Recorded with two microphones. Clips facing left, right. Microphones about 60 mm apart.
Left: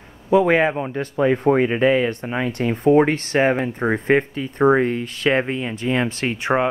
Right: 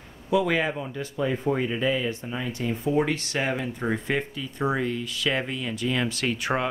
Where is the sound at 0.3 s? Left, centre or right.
Left.